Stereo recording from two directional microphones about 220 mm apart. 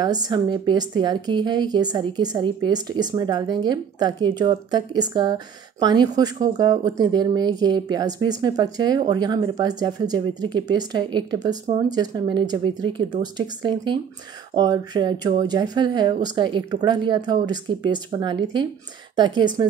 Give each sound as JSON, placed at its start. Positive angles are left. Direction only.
{"t": 0.0, "sound": "a woman's voice", "side_deg": -20}